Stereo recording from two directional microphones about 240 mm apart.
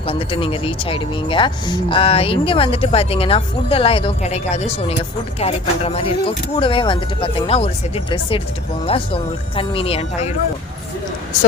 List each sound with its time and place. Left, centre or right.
0.1 s speech: left